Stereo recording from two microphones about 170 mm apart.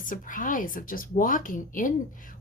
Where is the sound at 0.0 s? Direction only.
50° left (ahead or behind).